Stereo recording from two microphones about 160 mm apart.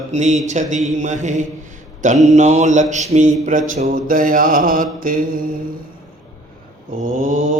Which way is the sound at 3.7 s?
55° right (ahead or behind).